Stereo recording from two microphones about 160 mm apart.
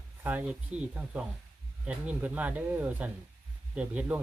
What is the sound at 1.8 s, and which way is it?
Speech, 10° right (ahead or behind).